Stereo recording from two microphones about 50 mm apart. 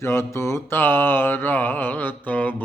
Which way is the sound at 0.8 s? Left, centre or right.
Left.